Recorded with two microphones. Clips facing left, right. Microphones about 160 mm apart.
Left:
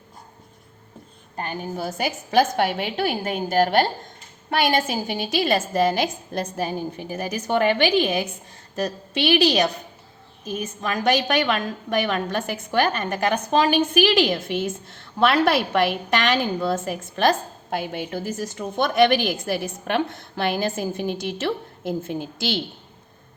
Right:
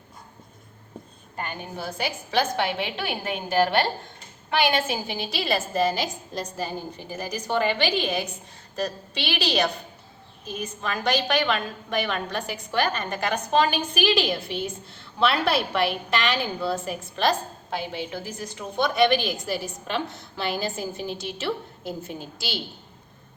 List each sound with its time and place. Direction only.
1.4 s a woman's voice: 40° left (ahead or behind)
10.4 s a woman's voice: 50° left (ahead or behind)